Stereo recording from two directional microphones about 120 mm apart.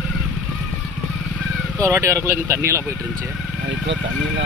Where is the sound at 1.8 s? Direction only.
25° right (ahead or behind).